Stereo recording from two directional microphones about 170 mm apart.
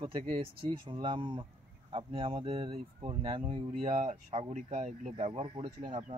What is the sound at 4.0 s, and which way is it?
Speech, 45° right (ahead or behind).